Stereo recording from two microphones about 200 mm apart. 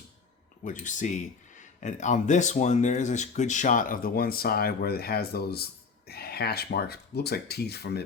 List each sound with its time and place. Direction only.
0.6 s speech: 40° left (ahead or behind)